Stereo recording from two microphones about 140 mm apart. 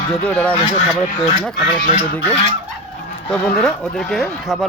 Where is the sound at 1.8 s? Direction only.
75° left (ahead or behind).